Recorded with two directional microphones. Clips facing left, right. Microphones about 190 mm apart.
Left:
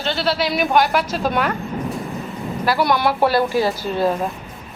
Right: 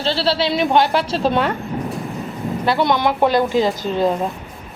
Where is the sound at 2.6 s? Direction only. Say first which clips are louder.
Right 1 dB; 20° right (ahead or behind).